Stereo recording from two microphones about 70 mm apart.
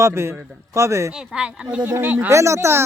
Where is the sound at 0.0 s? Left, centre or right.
Right.